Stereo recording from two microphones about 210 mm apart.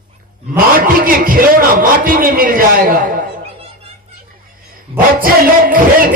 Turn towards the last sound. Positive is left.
turn(degrees=-45)  # may be behind; listen again after turning